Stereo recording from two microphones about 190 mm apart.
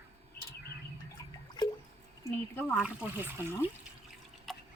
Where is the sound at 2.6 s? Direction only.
10° left (ahead or behind).